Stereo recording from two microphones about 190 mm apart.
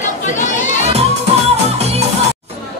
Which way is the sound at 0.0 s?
40° left (ahead or behind).